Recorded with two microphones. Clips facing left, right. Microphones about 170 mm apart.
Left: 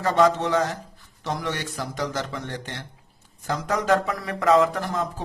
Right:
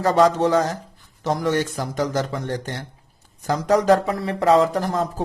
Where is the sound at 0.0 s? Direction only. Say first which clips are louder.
Right 3 dB; 40° right (ahead or behind).